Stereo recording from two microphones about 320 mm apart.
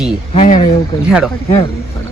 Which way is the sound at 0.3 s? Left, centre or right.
Centre.